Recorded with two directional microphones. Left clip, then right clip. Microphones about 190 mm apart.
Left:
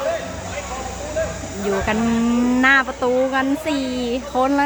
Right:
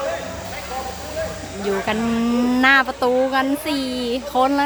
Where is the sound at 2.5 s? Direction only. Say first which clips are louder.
Right 1 dB; 10° right (ahead or behind).